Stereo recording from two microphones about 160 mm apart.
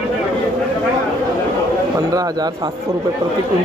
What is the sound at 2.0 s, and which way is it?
Speech, 20° right (ahead or behind).